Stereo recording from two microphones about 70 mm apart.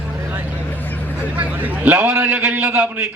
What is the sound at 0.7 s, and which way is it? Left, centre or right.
Vehicle, left.